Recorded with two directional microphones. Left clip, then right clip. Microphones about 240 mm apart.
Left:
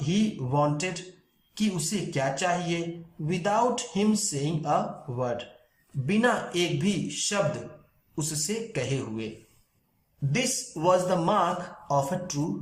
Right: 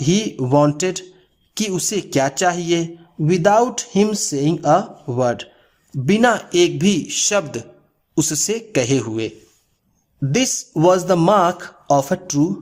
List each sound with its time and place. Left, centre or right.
0.0 s speech: right
10.3 s speech: right